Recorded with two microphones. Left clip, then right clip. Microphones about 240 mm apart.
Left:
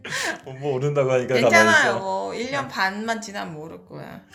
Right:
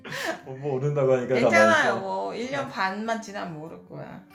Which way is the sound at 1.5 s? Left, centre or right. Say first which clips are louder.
Left 3 dB; left.